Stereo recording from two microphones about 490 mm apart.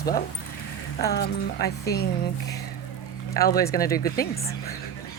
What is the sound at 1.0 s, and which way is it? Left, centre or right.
Speech, centre.